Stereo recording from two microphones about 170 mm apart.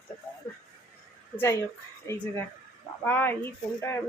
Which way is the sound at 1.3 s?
10° left (ahead or behind).